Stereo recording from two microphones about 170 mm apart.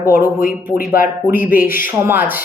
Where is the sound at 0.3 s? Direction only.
55° left (ahead or behind).